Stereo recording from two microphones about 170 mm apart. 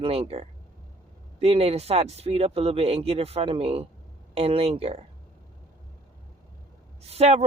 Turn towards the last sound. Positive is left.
turn(degrees=-40)  # may be behind; listen again after turning